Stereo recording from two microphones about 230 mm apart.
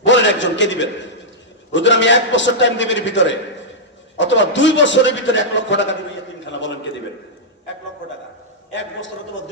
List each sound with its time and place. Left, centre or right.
0.0 s a man's voice: left
8.7 s a man's voice: left